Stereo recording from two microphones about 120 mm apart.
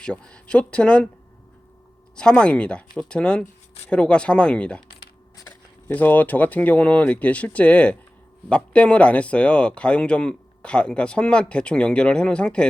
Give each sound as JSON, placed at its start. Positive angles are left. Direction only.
{"t": 0.0, "sound": "speech", "side_deg": 5}
{"t": 2.1, "sound": "speech", "side_deg": 10}
{"t": 5.9, "sound": "speech", "side_deg": 15}